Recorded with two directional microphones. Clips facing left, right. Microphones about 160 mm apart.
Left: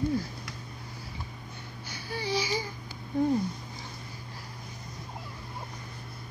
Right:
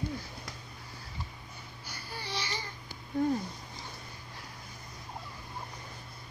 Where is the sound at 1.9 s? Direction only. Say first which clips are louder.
Left 9 dB; centre (ahead or behind).